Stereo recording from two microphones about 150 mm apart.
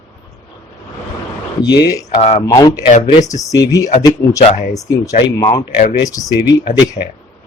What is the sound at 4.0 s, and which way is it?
Speech, 20° left (ahead or behind).